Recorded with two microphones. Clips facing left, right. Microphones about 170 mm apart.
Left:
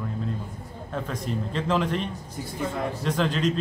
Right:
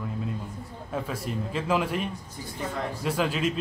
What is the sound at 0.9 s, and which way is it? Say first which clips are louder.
Speech: left 1 dB; 5° right (ahead or behind).